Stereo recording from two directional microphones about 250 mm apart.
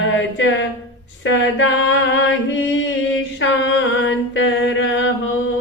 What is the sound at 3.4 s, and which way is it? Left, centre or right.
Mantra, left.